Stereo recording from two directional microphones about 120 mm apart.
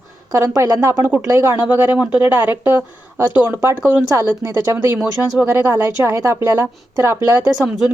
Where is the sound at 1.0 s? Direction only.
10° right (ahead or behind).